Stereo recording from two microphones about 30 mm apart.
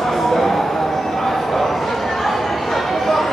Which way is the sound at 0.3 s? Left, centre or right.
Centre.